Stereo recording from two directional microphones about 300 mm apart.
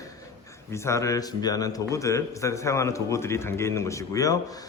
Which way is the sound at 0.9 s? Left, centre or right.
Centre.